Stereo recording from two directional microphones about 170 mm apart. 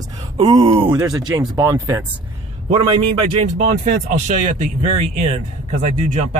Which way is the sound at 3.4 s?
50° right (ahead or behind).